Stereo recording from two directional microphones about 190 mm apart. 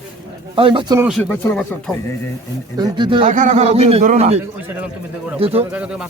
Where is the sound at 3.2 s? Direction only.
40° right (ahead or behind).